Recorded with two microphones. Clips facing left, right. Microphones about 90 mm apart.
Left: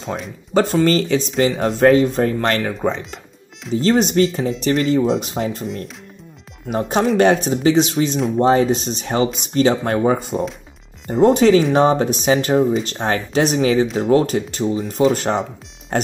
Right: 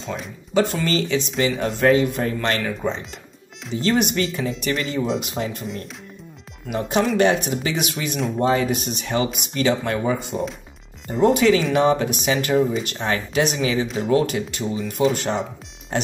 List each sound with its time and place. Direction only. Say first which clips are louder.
0.6 s speech: left 5 dB; 40° left (ahead or behind)
3.7 s speech: left 5 dB; 35° left (ahead or behind)
6.7 s speech: left 3 dB; 35° left (ahead or behind)
15.0 s speech: left 3 dB; 45° left (ahead or behind)